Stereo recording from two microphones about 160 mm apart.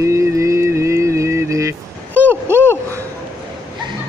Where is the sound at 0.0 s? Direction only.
20° right (ahead or behind).